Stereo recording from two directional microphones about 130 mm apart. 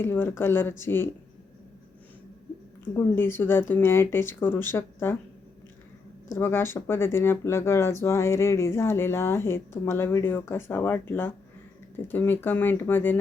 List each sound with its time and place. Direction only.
0.0 s speech: 15° left (ahead or behind)
2.9 s speech: 15° left (ahead or behind)
6.3 s speech: 15° left (ahead or behind)